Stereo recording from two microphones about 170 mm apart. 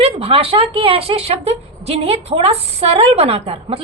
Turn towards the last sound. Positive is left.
turn(degrees=-35)  # may be behind; listen again after turning